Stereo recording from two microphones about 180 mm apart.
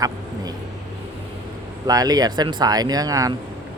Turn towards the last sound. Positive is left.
turn(degrees=-20)  # may be behind; listen again after turning